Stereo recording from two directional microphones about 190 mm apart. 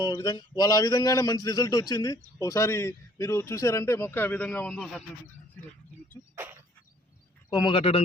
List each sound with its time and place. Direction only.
0.0 s speech: 20° left (ahead or behind)
6.3 s insect: 10° right (ahead or behind)
7.5 s a man's voice: 25° left (ahead or behind)